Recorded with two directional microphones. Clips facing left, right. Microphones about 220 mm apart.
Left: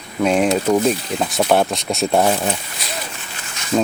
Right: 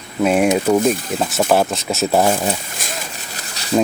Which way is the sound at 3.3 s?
35° right (ahead or behind).